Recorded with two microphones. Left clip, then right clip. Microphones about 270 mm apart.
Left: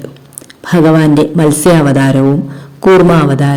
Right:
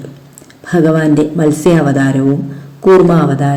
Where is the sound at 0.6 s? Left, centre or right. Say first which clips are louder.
Left 3 dB; left.